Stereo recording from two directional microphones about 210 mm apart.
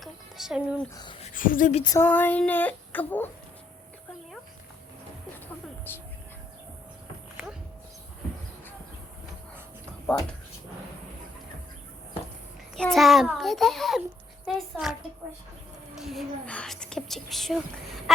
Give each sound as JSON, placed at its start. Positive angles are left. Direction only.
{"t": 0.0, "sound": "a sound", "side_deg": 0}
{"t": 0.9, "sound": "speech", "side_deg": 25}
{"t": 1.3, "sound": "a woman's voice", "side_deg": 40}
{"t": 1.8, "sound": "speech", "side_deg": 15}
{"t": 5.9, "sound": "speech", "side_deg": 10}
{"t": 12.7, "sound": "a child's voice", "side_deg": 0}
{"t": 16.0, "sound": "speech", "side_deg": 0}